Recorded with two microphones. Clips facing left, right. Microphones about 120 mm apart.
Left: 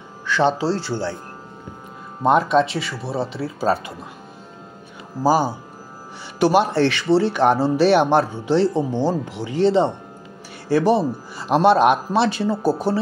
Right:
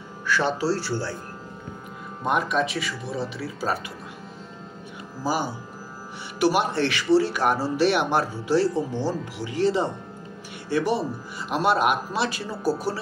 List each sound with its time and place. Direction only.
0.4 s speech: 25° left (ahead or behind)
2.2 s speech: 30° left (ahead or behind)
5.2 s speech: 40° left (ahead or behind)
6.4 s speech: 30° left (ahead or behind)